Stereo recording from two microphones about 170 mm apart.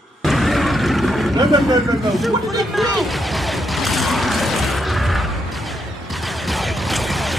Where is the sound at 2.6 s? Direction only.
Centre (ahead or behind).